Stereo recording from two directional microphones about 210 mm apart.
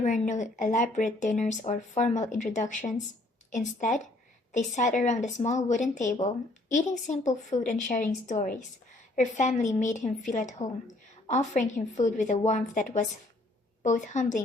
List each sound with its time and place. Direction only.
0.0 s speech: 35° left (ahead or behind)
14.1 s speech: 35° left (ahead or behind)